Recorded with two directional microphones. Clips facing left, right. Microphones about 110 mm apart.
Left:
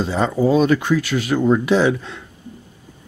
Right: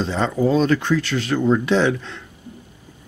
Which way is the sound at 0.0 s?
10° left (ahead or behind).